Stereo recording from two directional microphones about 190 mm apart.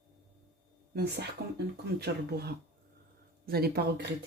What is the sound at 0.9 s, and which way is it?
Speech, 60° right (ahead or behind).